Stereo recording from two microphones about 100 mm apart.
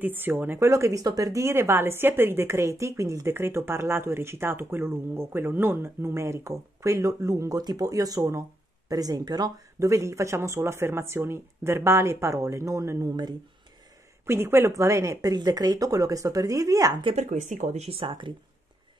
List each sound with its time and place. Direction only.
0.0 s a woman's voice: 20° right (ahead or behind)
0.7 s a woman's voice: 30° right (ahead or behind)
14.2 s speech: 25° right (ahead or behind)
17.7 s speech: 75° right (ahead or behind); by 18.3 s 55° right (ahead or behind)